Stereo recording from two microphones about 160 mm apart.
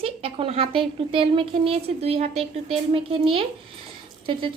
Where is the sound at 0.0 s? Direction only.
35° right (ahead or behind).